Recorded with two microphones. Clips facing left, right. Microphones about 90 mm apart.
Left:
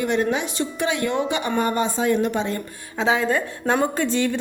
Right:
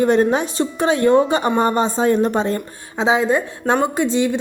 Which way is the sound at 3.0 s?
20° right (ahead or behind).